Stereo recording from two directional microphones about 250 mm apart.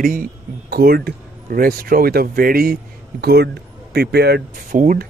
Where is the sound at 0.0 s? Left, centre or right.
Right.